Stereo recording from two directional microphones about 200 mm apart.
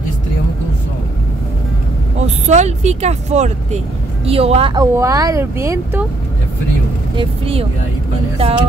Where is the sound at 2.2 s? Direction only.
35° right (ahead or behind).